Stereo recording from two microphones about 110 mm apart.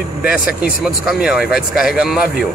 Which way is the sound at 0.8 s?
5° right (ahead or behind).